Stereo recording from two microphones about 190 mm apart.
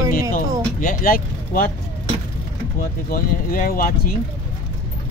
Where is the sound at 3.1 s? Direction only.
50° left (ahead or behind).